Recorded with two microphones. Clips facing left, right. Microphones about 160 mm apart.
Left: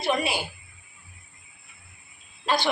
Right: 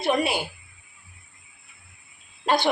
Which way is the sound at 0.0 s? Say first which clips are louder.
Right 3 dB; 55° right (ahead or behind).